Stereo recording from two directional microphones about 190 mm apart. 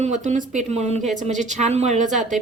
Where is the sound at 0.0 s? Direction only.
40° right (ahead or behind).